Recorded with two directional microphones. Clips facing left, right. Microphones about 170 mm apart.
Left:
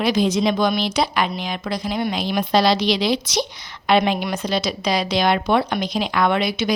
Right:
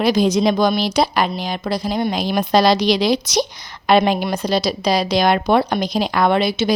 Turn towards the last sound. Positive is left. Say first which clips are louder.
# right 3 dB
turn(degrees=-30)  # may be behind; listen again after turning